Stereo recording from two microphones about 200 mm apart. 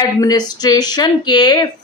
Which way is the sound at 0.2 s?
20° left (ahead or behind).